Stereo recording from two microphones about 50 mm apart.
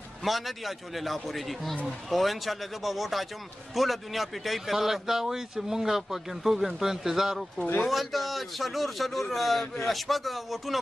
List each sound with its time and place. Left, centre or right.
0.2 s a man's voice: centre